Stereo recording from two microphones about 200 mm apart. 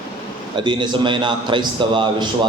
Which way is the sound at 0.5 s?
25° right (ahead or behind).